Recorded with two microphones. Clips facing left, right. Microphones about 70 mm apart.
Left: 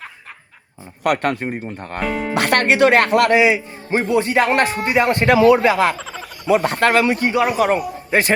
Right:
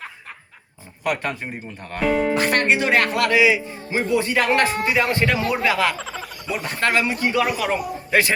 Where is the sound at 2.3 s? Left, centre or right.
Left.